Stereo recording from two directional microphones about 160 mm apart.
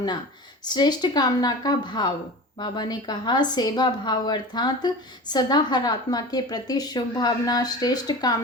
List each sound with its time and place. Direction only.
0.6 s a woman's voice: 25° left (ahead or behind)